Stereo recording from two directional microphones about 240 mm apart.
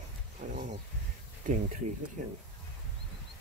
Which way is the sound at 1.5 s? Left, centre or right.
Right.